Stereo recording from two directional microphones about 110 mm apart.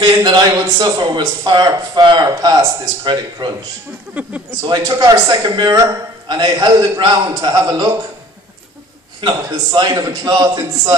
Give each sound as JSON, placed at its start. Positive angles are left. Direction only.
{"t": 0.0, "sound": "a sound", "side_deg": -40}
{"t": 0.5, "sound": "a man's voice", "side_deg": -35}
{"t": 4.1, "sound": "speech", "side_deg": -15}
{"t": 4.6, "sound": "a man's voice", "side_deg": -40}
{"t": 9.2, "sound": "a man's voice", "side_deg": -40}